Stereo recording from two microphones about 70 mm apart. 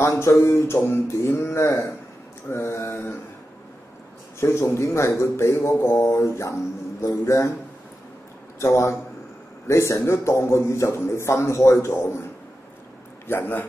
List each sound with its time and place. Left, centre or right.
0.0 s a man's voice: left
4.4 s speech: left
8.5 s a man's voice: left
13.3 s a man's voice: left